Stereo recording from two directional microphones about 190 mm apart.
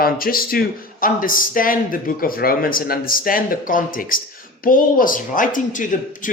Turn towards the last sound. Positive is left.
turn(degrees=45)  # may be behind; listen again after turning